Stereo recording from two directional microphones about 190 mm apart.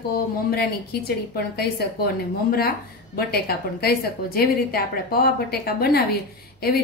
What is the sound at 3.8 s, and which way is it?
A woman's voice, 50° left (ahead or behind).